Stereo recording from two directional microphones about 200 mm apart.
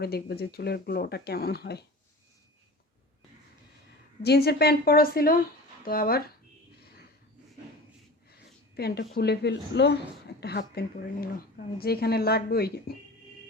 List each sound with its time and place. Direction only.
0.0 s speech: 50° left (ahead or behind)
4.2 s speech: 55° left (ahead or behind)
8.7 s a woman's voice: 55° left (ahead or behind)